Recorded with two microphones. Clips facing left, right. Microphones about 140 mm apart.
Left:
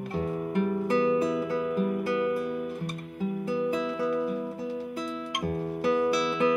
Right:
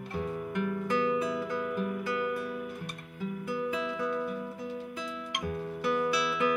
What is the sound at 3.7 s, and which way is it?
Music, 35° left (ahead or behind).